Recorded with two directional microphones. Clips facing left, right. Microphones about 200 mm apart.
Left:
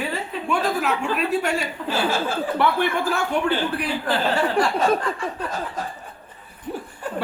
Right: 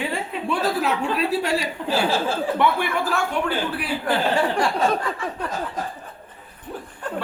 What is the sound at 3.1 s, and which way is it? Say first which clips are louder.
Speech: left 1 dB; 5° right (ahead or behind).